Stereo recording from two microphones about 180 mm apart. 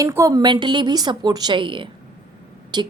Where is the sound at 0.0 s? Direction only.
15° right (ahead or behind).